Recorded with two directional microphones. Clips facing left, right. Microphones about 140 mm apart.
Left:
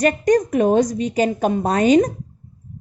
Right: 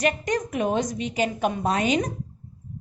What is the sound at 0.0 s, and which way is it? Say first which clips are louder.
A woman's voice: left 8 dB; 40° left (ahead or behind).